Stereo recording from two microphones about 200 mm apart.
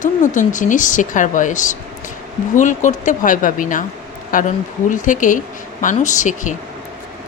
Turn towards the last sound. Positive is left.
turn(degrees=40)  # may be behind; listen again after turning